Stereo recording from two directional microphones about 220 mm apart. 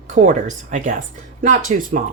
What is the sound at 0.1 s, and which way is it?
A woman's voice, 35° right (ahead or behind).